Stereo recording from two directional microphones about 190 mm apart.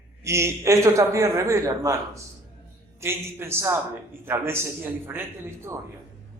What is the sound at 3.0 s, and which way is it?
A man's voice, 15° right (ahead or behind).